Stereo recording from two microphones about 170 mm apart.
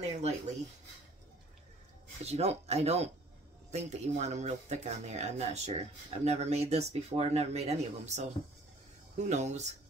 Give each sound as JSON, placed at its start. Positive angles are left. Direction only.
{"t": 0.0, "sound": "speech", "side_deg": -40}
{"t": 2.2, "sound": "speech", "side_deg": -40}